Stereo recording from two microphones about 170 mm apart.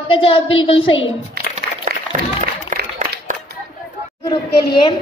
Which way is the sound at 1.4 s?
65° right (ahead or behind).